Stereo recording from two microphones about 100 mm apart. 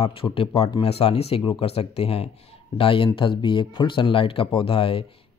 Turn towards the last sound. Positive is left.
turn(degrees=65)  # may be behind; listen again after turning